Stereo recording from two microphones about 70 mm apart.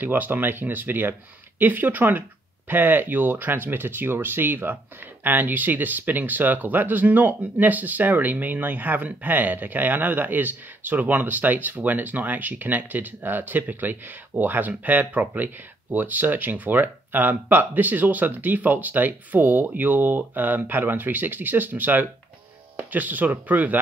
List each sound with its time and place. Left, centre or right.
0.0 s speech: right